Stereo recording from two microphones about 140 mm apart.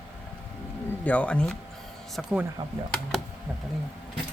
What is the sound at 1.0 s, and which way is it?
Speech, 10° left (ahead or behind).